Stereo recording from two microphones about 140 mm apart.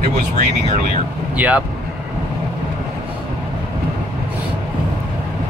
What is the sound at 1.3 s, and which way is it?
Speech, 10° right (ahead or behind).